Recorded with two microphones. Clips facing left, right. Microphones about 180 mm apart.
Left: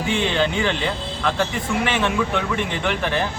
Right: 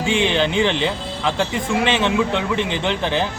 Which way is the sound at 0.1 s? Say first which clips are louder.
Right 2 dB; 20° right (ahead or behind).